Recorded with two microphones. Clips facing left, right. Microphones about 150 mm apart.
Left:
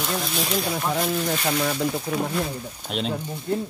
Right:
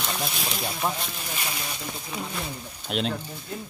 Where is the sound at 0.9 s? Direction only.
80° left.